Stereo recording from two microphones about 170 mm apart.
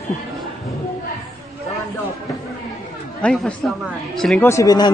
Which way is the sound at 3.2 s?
5° left (ahead or behind).